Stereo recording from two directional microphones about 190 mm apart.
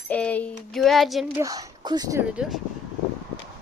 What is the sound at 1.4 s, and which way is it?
Speech, 20° right (ahead or behind).